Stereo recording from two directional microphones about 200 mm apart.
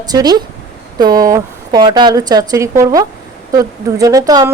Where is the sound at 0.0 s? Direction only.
20° right (ahead or behind).